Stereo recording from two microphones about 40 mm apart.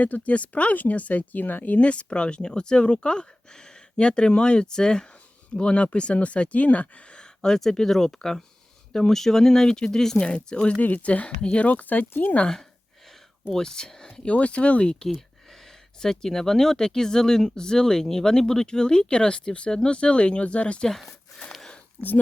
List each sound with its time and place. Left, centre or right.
0.0 s speech: left
1.8 s speech: left
7.2 s speech: centre
10.2 s speech: left
10.8 s speech: left
13.6 s speech: centre
14.3 s speech: left
16.0 s speech: centre; by 20.8 s left
20.8 s speech: centre
22.0 s speech: right